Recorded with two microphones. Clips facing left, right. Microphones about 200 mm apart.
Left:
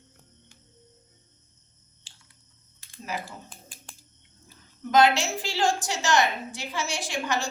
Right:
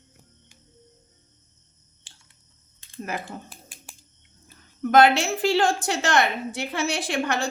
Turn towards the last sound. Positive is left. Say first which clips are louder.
# right 4 dB
turn(degrees=-60)  # may be behind; listen again after turning